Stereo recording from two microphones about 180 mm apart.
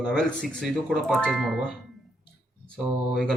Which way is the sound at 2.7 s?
5° left (ahead or behind).